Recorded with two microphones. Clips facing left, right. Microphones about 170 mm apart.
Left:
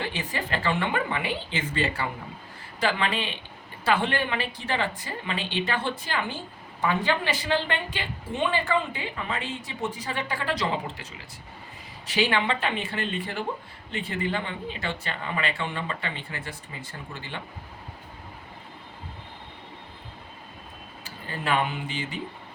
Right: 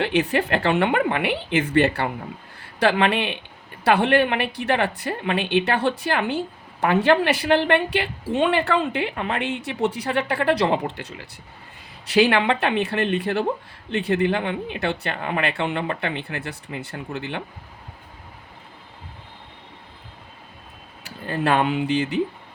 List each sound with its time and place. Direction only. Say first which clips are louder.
0.0 s a woman's voice: right 11 dB; 70° right (ahead or behind)
21.0 s speech: right 9 dB; 70° right (ahead or behind)